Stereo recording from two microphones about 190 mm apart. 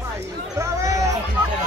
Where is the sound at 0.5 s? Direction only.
15° right (ahead or behind).